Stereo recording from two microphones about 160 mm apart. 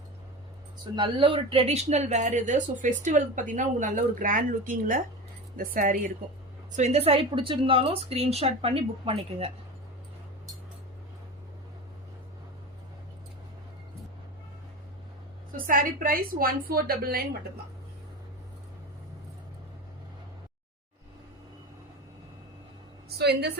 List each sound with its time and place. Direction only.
0.9 s a woman's voice: 30° right (ahead or behind); by 6.1 s 55° right (ahead or behind)
6.7 s a woman's voice: 45° right (ahead or behind)
15.6 s a woman's voice: 60° right (ahead or behind)
23.0 s a sound: 85° right